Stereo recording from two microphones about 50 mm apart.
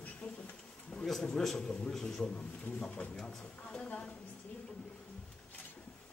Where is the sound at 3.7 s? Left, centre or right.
Left.